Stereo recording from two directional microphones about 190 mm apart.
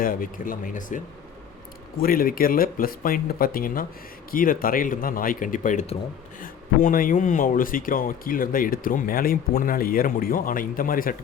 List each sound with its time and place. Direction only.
0.0 s speech: 45° left (ahead or behind)
6.4 s speech: 45° left (ahead or behind)